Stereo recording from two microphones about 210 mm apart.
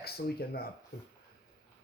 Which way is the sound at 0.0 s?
50° left (ahead or behind).